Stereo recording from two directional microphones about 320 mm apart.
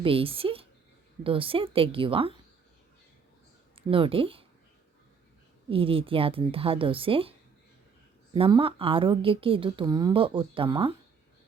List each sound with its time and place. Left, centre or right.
0.0 s a woman's voice: centre
3.8 s speech: centre
5.6 s a woman's voice: centre